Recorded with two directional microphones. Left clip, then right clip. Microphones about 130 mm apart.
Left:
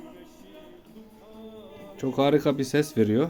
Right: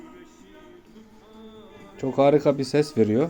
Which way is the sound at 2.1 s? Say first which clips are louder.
Right 4 dB; 15° left (ahead or behind).